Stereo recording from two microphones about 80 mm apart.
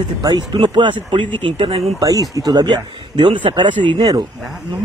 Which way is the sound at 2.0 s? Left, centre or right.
Right.